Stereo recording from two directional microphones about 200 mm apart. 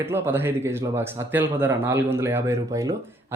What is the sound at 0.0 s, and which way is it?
A man's voice, 10° right (ahead or behind).